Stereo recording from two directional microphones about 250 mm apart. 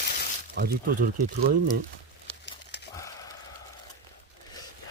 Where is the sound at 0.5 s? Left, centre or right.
Right.